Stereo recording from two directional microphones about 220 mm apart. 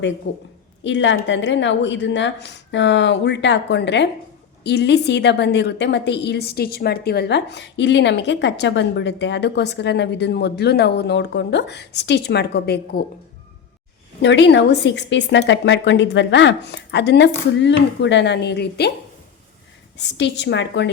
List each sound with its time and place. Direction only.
0.3 s a woman's voice: 55° left (ahead or behind)
14.2 s a woman's voice: 55° left (ahead or behind)
20.0 s a woman's voice: 50° left (ahead or behind)